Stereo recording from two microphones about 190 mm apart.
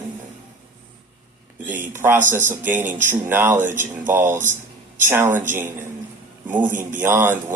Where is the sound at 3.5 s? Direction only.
40° right (ahead or behind).